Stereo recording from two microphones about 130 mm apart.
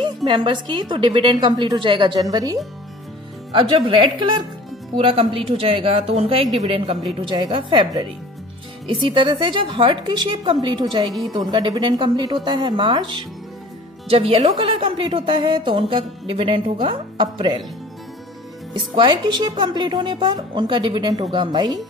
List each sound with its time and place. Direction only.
0.0 s a woman's voice: 35° right (ahead or behind)
3.5 s a woman's voice: 40° right (ahead or behind)
7.2 s a woman's voice: 35° right (ahead or behind)
11.1 s a woman's voice: centre (ahead or behind)
11.3 s a woman's voice: 35° right (ahead or behind)
18.7 s a woman's voice: 35° right (ahead or behind)